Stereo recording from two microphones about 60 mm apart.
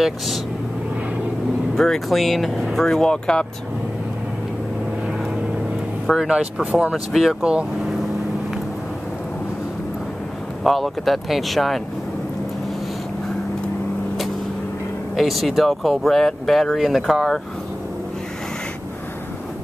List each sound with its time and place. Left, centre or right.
1.8 s speech: centre
6.1 s speech: centre
6.6 s speech: right
7.1 s speech: centre
10.6 s speech: centre
15.1 s speech: centre